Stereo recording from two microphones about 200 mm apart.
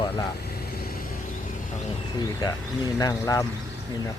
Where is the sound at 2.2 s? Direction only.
20° left (ahead or behind).